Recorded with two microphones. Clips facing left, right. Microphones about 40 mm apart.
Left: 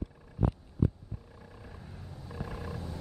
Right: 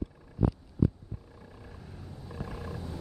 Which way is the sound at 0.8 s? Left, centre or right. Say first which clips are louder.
Right 3 dB; left.